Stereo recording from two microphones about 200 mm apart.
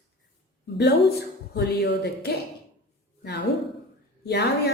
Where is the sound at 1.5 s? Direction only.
55° left (ahead or behind).